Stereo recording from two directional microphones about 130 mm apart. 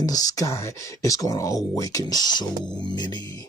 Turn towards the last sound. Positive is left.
turn(degrees=35)  # may be behind; listen again after turning